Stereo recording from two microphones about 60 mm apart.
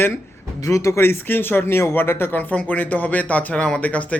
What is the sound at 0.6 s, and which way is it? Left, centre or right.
Speech, left.